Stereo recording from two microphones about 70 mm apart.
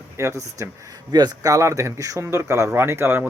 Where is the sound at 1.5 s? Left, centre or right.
Right.